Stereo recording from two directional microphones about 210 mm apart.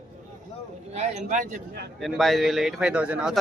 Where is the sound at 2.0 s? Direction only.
Centre (ahead or behind).